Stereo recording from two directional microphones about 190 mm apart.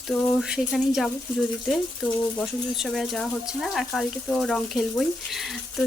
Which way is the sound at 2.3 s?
Centre (ahead or behind).